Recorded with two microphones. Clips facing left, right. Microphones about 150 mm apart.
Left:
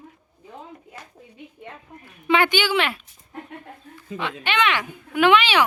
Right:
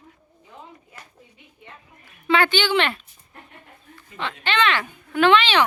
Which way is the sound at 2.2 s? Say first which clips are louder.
Even; 15° left (ahead or behind).